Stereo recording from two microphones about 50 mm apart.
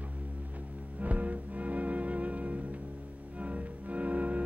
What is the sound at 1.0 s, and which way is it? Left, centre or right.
Music, right.